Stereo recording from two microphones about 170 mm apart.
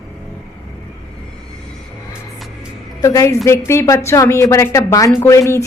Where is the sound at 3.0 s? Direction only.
20° left (ahead or behind).